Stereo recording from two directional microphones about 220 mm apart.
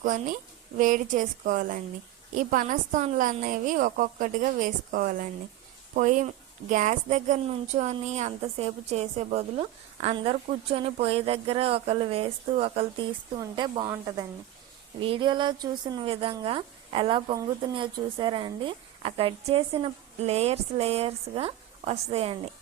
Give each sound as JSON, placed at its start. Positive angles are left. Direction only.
{"t": 0.0, "sound": "a woman's voice", "side_deg": -40}